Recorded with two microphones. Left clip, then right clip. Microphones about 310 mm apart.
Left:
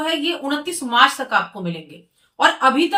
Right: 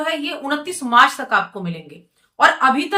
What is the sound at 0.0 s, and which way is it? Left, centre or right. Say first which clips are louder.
Speech: left 1 dB; centre.